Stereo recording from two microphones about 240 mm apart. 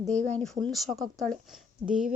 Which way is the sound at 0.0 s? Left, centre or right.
Centre.